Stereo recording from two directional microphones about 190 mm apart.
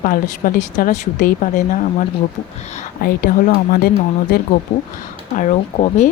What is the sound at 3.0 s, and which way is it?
Speech, 50° left (ahead or behind).